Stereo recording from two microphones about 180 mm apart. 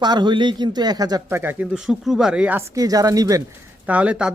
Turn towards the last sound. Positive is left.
turn(degrees=-5)  # may be behind; listen again after turning